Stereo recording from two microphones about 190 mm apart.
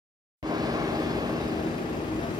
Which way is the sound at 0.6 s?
20° right (ahead or behind).